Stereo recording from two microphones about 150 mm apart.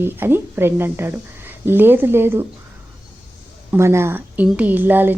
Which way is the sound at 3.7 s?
15° right (ahead or behind).